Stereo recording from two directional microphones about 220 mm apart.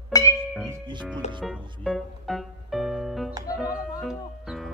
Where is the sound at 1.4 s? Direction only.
Centre (ahead or behind).